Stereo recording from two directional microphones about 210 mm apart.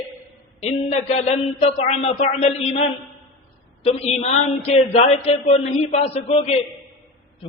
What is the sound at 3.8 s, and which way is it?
A man's voice, 30° left (ahead or behind).